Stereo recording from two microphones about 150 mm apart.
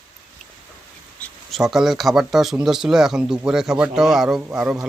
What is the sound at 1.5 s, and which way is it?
Speech, centre (ahead or behind).